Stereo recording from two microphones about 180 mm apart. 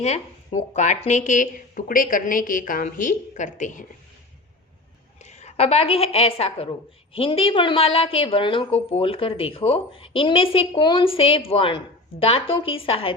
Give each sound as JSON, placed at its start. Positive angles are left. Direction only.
{"t": 0.0, "sound": "speech", "side_deg": 40}
{"t": 5.2, "sound": "a woman's voice", "side_deg": 40}